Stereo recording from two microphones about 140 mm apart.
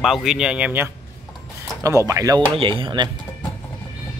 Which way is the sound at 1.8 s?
20° right (ahead or behind).